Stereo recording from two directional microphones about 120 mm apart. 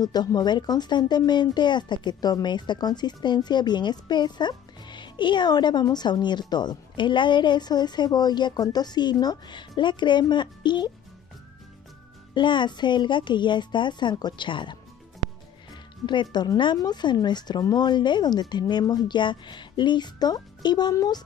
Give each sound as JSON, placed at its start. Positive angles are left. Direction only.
{"t": 0.0, "sound": "speech", "side_deg": 35}
{"t": 12.4, "sound": "speech", "side_deg": 40}